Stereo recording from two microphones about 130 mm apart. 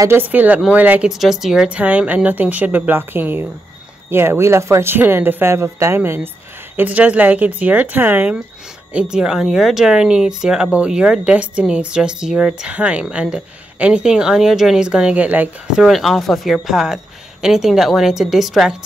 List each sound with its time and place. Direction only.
0.0 s speech: 15° right (ahead or behind)